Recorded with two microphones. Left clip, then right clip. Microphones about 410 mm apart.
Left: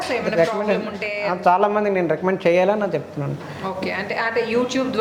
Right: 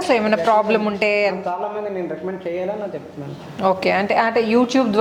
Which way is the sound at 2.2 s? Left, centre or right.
Left.